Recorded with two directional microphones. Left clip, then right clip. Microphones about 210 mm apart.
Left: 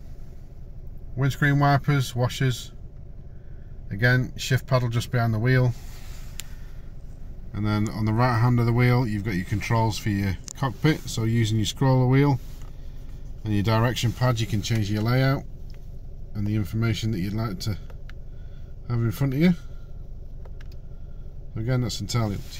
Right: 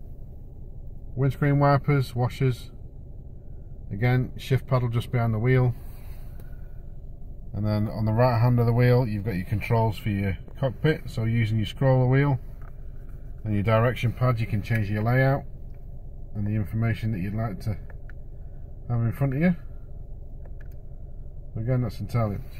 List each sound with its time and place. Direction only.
1.1 s speech: 20° left (ahead or behind)
3.9 s speech: 25° left (ahead or behind)
7.5 s speech: centre (ahead or behind)
13.4 s speech: 5° left (ahead or behind)
18.9 s speech: 5° left (ahead or behind)
21.5 s speech: 5° left (ahead or behind)